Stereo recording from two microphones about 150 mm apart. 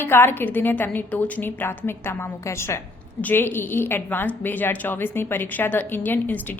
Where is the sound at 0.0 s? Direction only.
15° left (ahead or behind).